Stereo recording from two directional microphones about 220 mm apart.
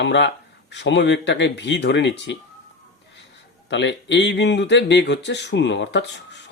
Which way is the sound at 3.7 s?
55° left (ahead or behind).